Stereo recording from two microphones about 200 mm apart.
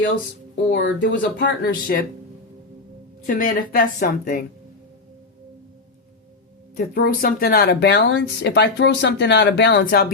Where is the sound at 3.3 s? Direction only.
40° left (ahead or behind).